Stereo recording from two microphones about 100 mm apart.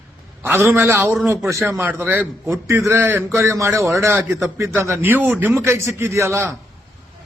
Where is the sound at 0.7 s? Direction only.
25° right (ahead or behind).